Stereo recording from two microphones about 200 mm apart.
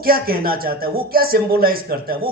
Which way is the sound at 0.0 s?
50° right (ahead or behind).